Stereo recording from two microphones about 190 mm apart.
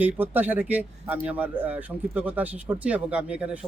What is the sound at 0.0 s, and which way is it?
Speech, 10° right (ahead or behind).